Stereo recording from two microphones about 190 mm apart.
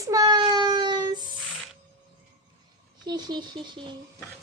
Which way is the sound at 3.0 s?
20° right (ahead or behind).